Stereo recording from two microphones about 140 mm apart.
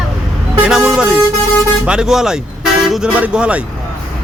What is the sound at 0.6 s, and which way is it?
Speech, 5° right (ahead or behind).